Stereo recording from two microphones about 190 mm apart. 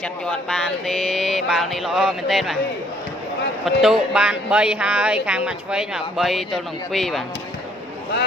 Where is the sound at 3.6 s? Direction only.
Centre (ahead or behind).